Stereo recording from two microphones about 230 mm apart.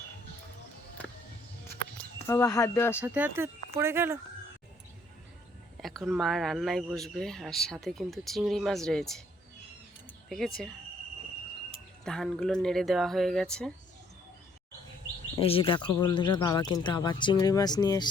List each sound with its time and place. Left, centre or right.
2.2 s speech: centre
3.0 s speech: centre
5.8 s speech: centre
10.2 s speech: centre
12.0 s speech: centre
15.4 s speech: left